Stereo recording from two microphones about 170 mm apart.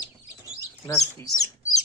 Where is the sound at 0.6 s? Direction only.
20° left (ahead or behind).